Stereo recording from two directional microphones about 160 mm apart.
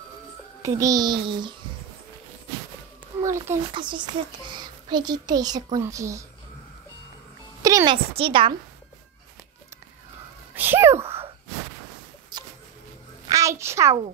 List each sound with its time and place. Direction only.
0.6 s speech: 20° right (ahead or behind)
3.2 s a child's voice: 20° right (ahead or behind)
3.7 s speech: 30° right (ahead or behind)
7.6 s a woman's voice: 25° right (ahead or behind)
10.5 s cat: 10° right (ahead or behind)
13.3 s a woman's voice: 20° right (ahead or behind)